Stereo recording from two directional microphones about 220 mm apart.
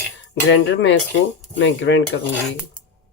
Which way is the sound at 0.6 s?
55° left (ahead or behind).